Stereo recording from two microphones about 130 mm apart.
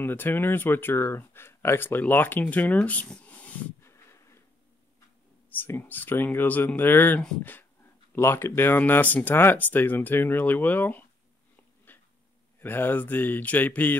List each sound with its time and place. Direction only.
0.0 s speech: 15° left (ahead or behind)
3.9 s a sound: 20° left (ahead or behind)
5.5 s speech: 15° left (ahead or behind)
11.9 s dog: 15° left (ahead or behind)
12.5 s speech: 15° left (ahead or behind)